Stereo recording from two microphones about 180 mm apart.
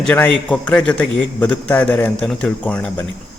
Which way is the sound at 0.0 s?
5° left (ahead or behind).